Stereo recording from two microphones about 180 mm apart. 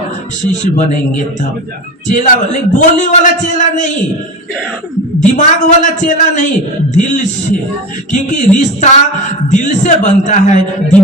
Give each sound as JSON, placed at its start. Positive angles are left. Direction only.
{"t": 0.6, "sound": "a man's voice", "side_deg": 45}
{"t": 5.3, "sound": "a man's voice", "side_deg": 45}